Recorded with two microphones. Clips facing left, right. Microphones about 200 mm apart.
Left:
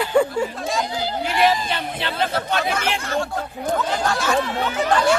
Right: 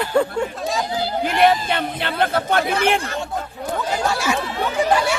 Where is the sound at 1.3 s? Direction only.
55° right (ahead or behind).